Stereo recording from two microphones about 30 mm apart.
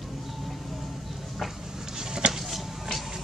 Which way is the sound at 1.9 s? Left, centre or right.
Right.